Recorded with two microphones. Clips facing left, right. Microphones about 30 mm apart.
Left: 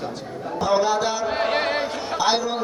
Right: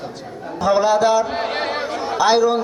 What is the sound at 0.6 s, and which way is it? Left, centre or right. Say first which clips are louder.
A man's voice: right 5 dB; centre.